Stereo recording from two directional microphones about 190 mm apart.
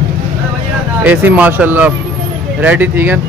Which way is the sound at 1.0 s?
10° right (ahead or behind).